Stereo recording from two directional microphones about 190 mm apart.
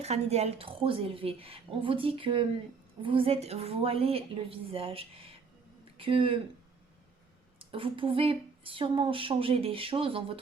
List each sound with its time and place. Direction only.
0.0 s a woman's voice: 35° right (ahead or behind)
7.7 s speech: 30° right (ahead or behind)